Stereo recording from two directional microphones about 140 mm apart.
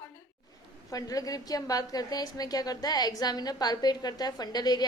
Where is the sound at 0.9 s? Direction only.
25° left (ahead or behind).